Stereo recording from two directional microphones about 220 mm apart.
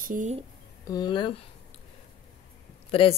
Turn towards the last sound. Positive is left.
turn(degrees=25)  # may be behind; listen again after turning